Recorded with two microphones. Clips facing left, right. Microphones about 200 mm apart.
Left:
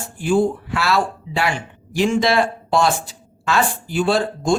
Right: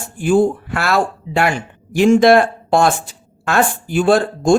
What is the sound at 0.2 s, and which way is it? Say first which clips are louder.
Speech: right 4 dB; 50° right (ahead or behind).